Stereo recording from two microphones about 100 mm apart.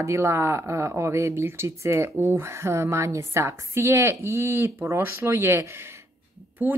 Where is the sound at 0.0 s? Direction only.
30° right (ahead or behind).